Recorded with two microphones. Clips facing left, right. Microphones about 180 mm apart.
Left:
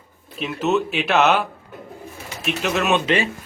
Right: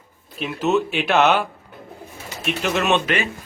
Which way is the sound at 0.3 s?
Centre (ahead or behind).